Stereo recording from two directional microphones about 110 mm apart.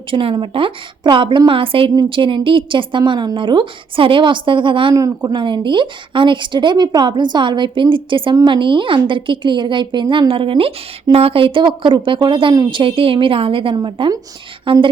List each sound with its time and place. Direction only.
0.1 s a woman's voice: 55° right (ahead or behind)